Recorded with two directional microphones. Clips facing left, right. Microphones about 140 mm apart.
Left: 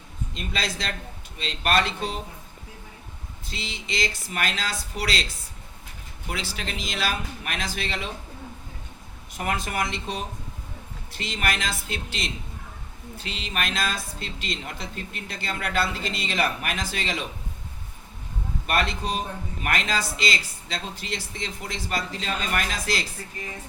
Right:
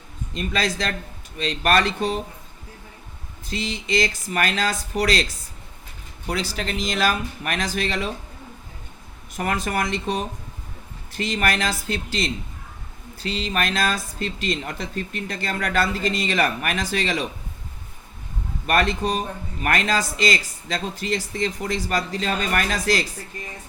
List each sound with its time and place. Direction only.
0.5 s speech: 45° right (ahead or behind)
3.4 s speech: 45° right (ahead or behind)
6.2 s speech: 40° right (ahead or behind)
9.4 s speech: 45° right (ahead or behind)
18.6 s speech: 45° right (ahead or behind)